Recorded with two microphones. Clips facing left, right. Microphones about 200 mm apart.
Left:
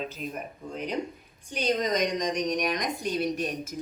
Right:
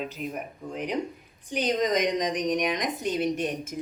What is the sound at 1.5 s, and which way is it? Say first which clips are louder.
A woman's voice: right 2 dB; 20° right (ahead or behind).